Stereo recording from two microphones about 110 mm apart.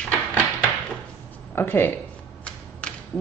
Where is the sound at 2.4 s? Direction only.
10° left (ahead or behind).